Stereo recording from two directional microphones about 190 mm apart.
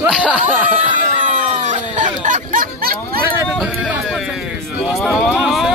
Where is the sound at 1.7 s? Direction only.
40° right (ahead or behind).